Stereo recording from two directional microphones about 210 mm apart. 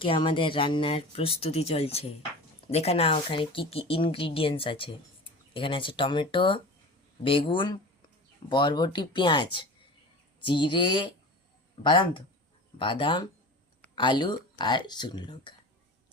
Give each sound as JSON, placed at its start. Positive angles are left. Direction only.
{"t": 0.0, "sound": "speech", "side_deg": 25}